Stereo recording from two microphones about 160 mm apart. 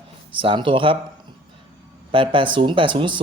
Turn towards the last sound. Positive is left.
turn(degrees=-30)  # may be behind; listen again after turning